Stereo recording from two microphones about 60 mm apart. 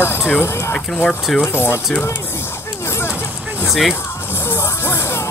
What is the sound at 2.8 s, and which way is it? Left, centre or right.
Vehicle, left.